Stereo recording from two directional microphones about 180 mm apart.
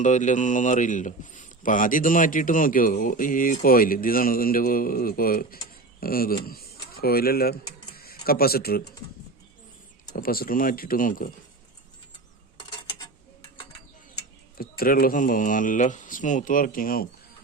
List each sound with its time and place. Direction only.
0.0 s speech: 45° left (ahead or behind)
10.1 s speech: 50° left (ahead or behind)
14.6 s speech: 55° left (ahead or behind)